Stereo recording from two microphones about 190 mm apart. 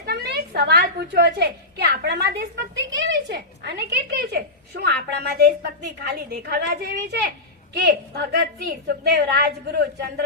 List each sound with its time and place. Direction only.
0.0 s a woman's voice: 55° right (ahead or behind)